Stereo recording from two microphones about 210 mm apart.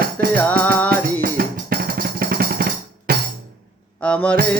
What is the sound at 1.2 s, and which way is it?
Drum, 45° right (ahead or behind).